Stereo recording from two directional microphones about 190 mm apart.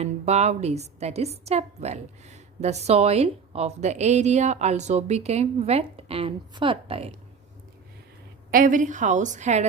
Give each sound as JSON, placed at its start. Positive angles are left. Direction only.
{"t": 0.0, "sound": "a woman's voice", "side_deg": -35}
{"t": 8.4, "sound": "a woman's voice", "side_deg": -45}